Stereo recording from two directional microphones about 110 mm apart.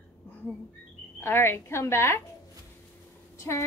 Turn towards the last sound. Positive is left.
turn(degrees=25)  # may be behind; listen again after turning